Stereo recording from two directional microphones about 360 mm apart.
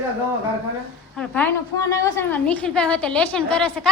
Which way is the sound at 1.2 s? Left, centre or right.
Centre.